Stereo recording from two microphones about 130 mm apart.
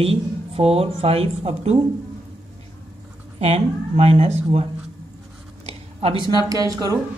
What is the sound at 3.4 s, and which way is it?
Speech, 55° right (ahead or behind).